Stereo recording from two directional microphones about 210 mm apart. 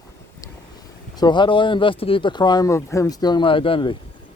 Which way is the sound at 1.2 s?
20° left (ahead or behind).